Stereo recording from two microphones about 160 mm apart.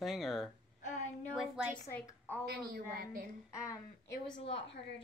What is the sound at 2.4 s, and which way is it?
Speech, 70° right (ahead or behind).